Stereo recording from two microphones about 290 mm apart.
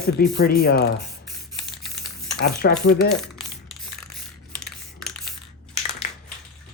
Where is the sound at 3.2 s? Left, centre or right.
Centre.